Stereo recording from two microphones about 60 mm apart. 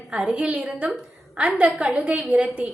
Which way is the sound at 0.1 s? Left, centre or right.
Centre.